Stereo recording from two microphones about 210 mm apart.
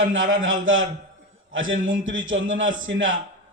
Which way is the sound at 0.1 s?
65° right (ahead or behind).